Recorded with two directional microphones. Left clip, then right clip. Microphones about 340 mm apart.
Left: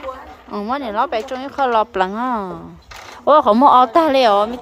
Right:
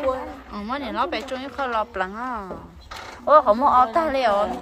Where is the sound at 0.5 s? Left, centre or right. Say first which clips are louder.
Left 6 dB; centre.